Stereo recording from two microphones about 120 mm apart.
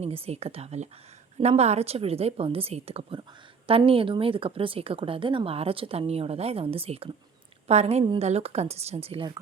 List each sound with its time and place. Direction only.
0.0 s a woman's voice: 55° right (ahead or behind)